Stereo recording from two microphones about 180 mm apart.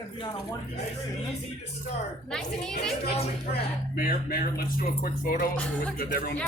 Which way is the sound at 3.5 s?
60° left (ahead or behind).